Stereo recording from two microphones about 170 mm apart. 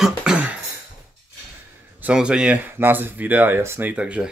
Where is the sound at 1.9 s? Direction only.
5° right (ahead or behind).